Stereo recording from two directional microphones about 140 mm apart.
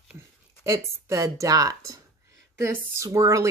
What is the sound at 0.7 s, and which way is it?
Speech, 20° right (ahead or behind).